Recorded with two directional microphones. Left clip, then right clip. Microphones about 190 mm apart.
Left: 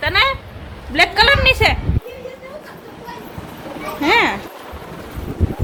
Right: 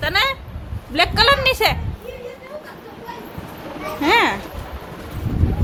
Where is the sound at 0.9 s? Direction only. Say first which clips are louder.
Left 2 dB; 10° right (ahead or behind).